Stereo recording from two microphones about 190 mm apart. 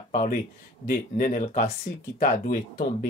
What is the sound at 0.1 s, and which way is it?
Speech, 40° left (ahead or behind).